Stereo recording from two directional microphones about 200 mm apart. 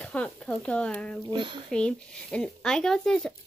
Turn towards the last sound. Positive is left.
turn(degrees=5)  # may be behind; listen again after turning